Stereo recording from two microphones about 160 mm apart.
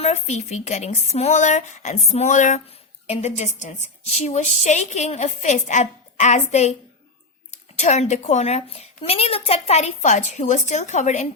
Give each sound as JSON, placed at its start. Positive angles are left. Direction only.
{"t": 0.0, "sound": "a woman's voice", "side_deg": 40}
{"t": 7.8, "sound": "a woman's voice", "side_deg": 45}